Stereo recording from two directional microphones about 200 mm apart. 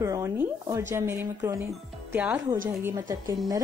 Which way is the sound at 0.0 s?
15° right (ahead or behind).